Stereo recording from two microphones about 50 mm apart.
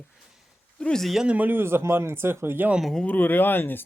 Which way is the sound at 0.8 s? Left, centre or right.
Centre.